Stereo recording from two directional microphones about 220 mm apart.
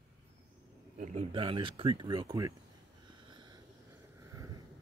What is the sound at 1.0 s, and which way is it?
Speech, 30° right (ahead or behind).